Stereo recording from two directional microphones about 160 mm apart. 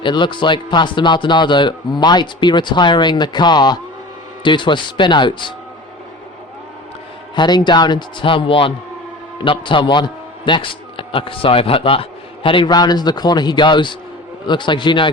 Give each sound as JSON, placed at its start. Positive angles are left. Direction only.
{"t": 0.0, "sound": "a man's voice", "side_deg": 30}
{"t": 7.3, "sound": "a man's voice", "side_deg": 25}